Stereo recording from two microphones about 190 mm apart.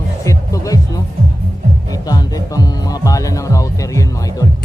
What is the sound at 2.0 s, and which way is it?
Speech, 20° left (ahead or behind).